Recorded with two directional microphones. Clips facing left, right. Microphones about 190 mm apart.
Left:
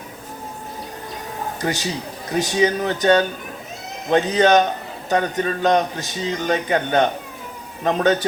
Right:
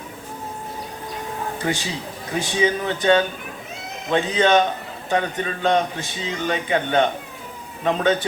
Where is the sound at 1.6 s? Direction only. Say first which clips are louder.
Left 3 dB; 40° left (ahead or behind).